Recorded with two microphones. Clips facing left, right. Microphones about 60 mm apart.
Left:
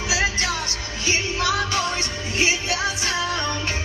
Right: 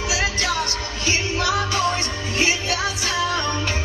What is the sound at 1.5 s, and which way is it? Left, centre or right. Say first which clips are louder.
Music: right 3 dB; right.